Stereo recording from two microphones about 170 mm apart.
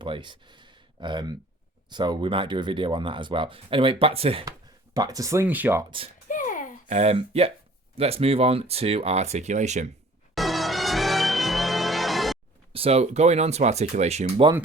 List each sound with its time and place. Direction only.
0.0 s speech: 30° right (ahead or behind)
4.9 s speech: 20° right (ahead or behind)
6.2 s a sound: 50° left (ahead or behind)
6.8 s speech: 40° right (ahead or behind)
10.3 s music: centre (ahead or behind)
12.7 s speech: 35° right (ahead or behind)